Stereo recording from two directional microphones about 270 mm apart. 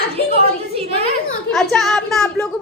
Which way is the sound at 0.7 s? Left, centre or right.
Right.